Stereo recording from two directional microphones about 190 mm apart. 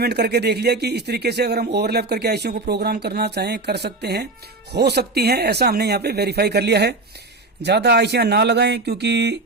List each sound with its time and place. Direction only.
0.0 s speech: 60° right (ahead or behind)